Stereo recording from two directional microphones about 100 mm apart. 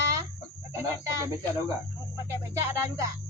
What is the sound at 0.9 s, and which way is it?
Speech, 35° right (ahead or behind).